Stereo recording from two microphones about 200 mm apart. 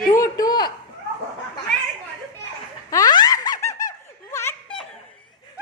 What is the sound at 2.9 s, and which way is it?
Laughter, 20° left (ahead or behind).